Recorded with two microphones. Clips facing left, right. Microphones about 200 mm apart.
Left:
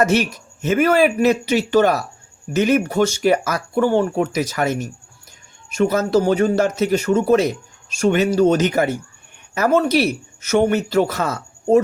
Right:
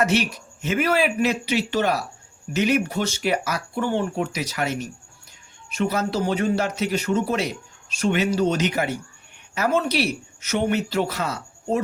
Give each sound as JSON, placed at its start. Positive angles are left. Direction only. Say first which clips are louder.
{"t": 0.0, "sound": "speech", "louder": "left 4 dB", "side_deg": 45}